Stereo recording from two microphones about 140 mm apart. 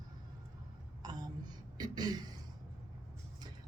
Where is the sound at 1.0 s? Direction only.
30° right (ahead or behind).